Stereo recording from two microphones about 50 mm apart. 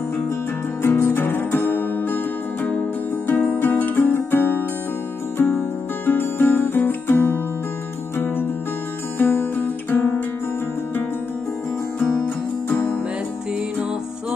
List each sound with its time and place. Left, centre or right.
0.8 s music: left
3.3 s music: left
6.0 s music: left
9.2 s music: left